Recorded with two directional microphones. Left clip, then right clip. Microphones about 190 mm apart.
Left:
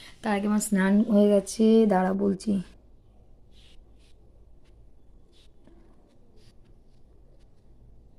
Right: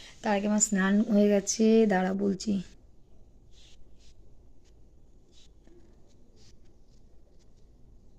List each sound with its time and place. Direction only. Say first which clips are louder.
0.0 s speech: even; 5° left (ahead or behind)
2.0 s speech: left 4 dB; 20° right (ahead or behind)
2.4 s speech: left 3 dB; 5° right (ahead or behind)